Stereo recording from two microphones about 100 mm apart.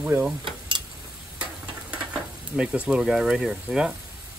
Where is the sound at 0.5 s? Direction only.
55° right (ahead or behind).